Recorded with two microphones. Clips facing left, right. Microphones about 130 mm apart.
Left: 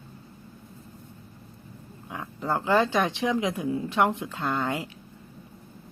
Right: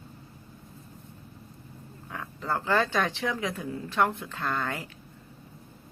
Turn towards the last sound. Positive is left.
turn(degrees=15)  # may be behind; listen again after turning